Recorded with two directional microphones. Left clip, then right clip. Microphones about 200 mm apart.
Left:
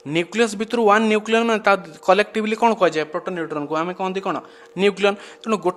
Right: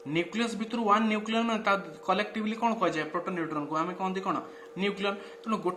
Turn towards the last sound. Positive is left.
turn(degrees=55)  # may be behind; listen again after turning